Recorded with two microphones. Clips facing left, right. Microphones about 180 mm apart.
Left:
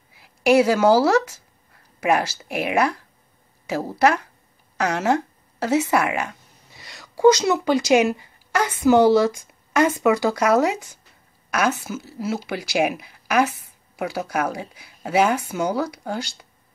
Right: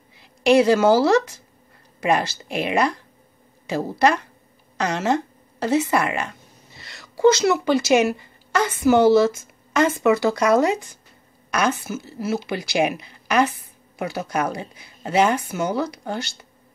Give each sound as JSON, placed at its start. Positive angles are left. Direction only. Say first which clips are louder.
{"t": 0.1, "sound": "a woman's voice", "louder": "right 1 dB", "side_deg": 5}